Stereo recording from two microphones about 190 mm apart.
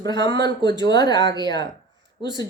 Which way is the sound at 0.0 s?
20° left (ahead or behind).